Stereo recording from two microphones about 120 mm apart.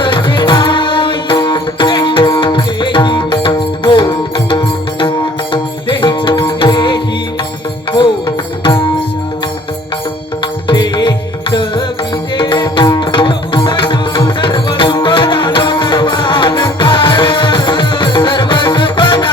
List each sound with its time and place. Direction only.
0.0 s music: 40° left (ahead or behind)
8.6 s tabla: 40° left (ahead or behind)
10.7 s music: 40° left (ahead or behind)
12.4 s tabla: 40° left (ahead or behind)